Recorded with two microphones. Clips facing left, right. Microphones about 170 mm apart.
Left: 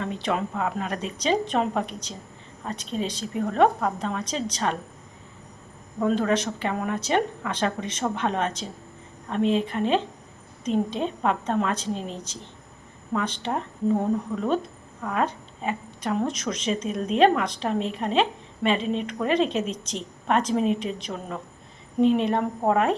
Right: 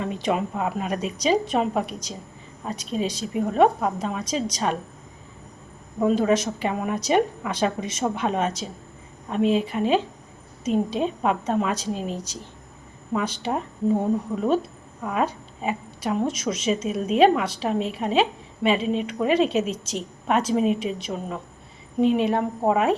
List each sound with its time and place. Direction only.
0.0 s a woman's voice: 10° right (ahead or behind)
6.0 s a woman's voice: 10° right (ahead or behind)
14.3 s speech: 25° right (ahead or behind)
15.0 s a woman's voice: 10° right (ahead or behind)
22.0 s a woman's voice: 5° right (ahead or behind)